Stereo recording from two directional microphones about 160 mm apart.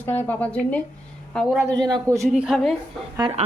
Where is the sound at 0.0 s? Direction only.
10° left (ahead or behind).